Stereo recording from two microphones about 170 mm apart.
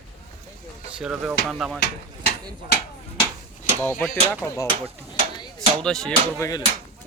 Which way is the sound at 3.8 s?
15° left (ahead or behind).